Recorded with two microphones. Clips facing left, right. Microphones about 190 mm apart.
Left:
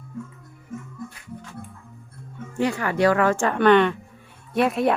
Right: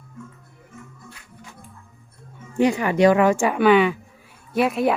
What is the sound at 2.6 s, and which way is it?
Speech, 15° right (ahead or behind).